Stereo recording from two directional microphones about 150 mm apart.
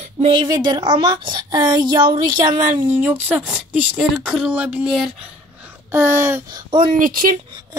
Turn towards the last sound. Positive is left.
turn(degrees=-70)  # may be behind; listen again after turning